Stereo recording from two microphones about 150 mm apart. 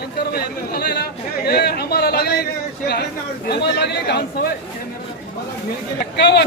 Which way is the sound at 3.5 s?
90° left.